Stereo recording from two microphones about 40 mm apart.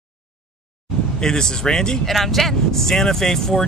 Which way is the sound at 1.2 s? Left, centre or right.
Centre.